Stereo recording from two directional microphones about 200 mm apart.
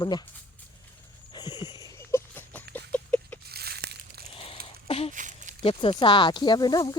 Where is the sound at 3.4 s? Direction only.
50° right (ahead or behind).